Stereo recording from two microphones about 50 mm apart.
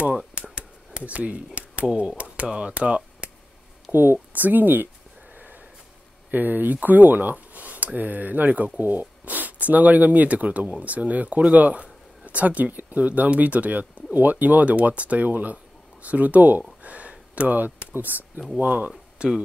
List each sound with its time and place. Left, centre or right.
0.3 s a sound: right
2.0 s speech: right
3.9 s speech: right
6.3 s speech: right
16.8 s a sound: right
18.6 s speech: right
18.9 s speech: centre